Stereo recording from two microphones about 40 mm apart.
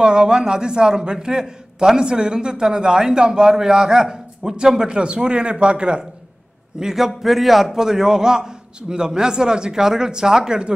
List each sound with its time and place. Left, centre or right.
0.0 s a man's voice: centre
6.8 s a man's voice: centre